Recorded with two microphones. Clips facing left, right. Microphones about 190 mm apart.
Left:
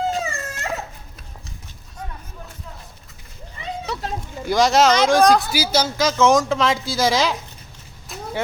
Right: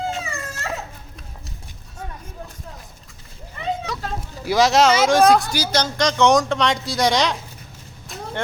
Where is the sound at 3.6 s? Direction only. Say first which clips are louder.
Right 6 dB; 65° right (ahead or behind).